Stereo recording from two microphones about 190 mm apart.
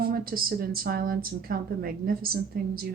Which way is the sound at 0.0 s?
50° right (ahead or behind).